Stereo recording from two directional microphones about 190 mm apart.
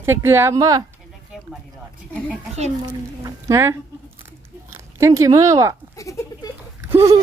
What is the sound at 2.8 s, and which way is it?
Speech, 20° right (ahead or behind).